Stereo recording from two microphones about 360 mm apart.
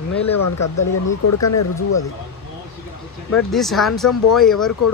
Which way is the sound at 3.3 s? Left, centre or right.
Centre.